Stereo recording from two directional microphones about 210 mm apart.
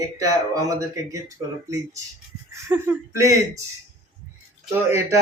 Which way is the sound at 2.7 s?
10° right (ahead or behind).